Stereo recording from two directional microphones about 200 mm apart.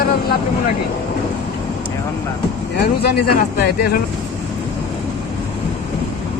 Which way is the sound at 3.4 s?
50° left (ahead or behind).